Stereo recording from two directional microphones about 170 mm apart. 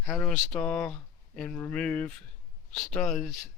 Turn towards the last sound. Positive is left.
turn(degrees=5)  # may be behind; listen again after turning